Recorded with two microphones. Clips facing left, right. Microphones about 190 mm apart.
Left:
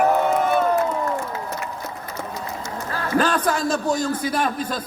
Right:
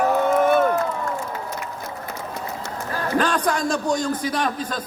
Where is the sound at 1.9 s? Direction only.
60° right (ahead or behind).